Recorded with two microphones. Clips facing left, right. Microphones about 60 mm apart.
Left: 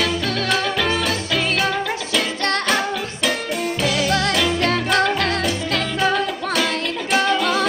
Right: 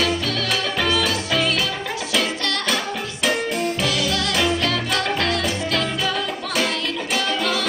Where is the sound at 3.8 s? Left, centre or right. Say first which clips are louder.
Left 2 dB; left.